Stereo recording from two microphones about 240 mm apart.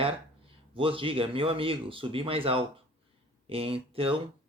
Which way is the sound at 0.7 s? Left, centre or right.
Right.